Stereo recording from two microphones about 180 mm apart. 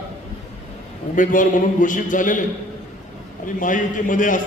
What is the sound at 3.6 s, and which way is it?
Speech, 45° left (ahead or behind).